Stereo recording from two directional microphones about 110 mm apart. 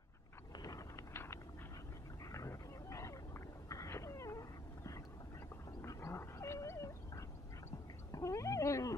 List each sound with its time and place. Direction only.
0.6 s a sound: 30° left (ahead or behind)
5.9 s gargling: 25° left (ahead or behind)
8.1 s wild animals: 30° left (ahead or behind)